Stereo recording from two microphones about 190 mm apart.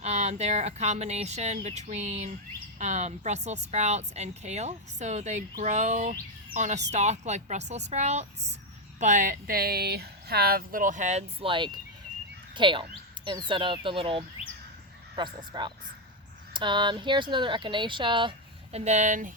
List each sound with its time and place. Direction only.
0.0 s a woman's voice: 35° right (ahead or behind)
18.9 s a woman's voice: 40° right (ahead or behind)